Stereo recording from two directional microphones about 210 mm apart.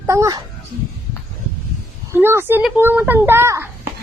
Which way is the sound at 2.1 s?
10° right (ahead or behind).